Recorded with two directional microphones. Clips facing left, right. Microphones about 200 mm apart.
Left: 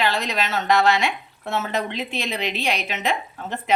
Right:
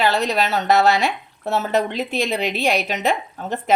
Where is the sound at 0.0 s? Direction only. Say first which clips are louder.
Right 4 dB; 40° right (ahead or behind).